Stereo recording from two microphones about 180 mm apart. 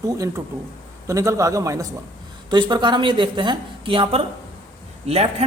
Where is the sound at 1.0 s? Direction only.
15° right (ahead or behind).